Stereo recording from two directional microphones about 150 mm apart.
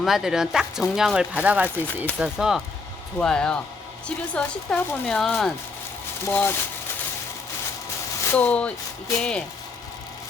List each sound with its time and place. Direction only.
0.0 s speech: centre (ahead or behind)
3.2 s speech: 5° left (ahead or behind)
6.2 s speech: 15° left (ahead or behind)
8.3 s speech: 10° left (ahead or behind)